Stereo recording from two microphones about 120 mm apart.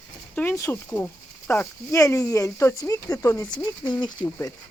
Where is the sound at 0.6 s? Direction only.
25° left (ahead or behind).